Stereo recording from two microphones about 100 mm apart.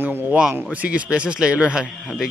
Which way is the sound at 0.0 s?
20° right (ahead or behind).